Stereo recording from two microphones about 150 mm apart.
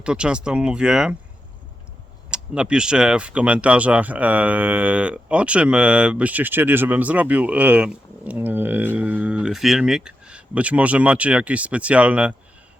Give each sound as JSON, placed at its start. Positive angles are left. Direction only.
{"t": 0.0, "sound": "speech", "side_deg": -5}
{"t": 2.3, "sound": "speech", "side_deg": -5}